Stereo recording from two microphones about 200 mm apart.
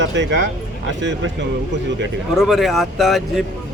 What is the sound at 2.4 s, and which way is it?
A man's voice, centre (ahead or behind).